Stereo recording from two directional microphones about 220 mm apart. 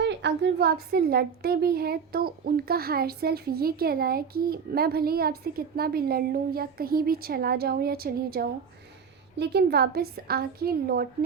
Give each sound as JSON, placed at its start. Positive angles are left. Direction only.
{"t": 0.0, "sound": "a woman's voice", "side_deg": -50}